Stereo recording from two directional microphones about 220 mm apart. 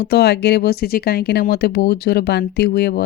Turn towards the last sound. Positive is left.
turn(degrees=45)  # may be behind; listen again after turning